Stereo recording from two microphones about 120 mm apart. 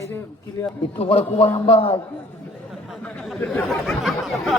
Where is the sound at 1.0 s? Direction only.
55° left (ahead or behind).